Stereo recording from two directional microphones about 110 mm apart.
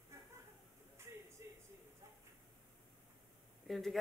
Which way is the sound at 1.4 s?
25° right (ahead or behind).